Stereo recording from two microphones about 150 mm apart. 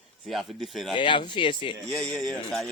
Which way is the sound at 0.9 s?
35° left (ahead or behind).